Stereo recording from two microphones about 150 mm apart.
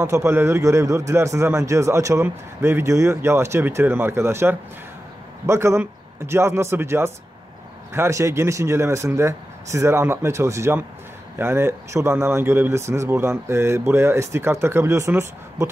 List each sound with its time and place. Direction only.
0.0 s a man's voice: 20° right (ahead or behind)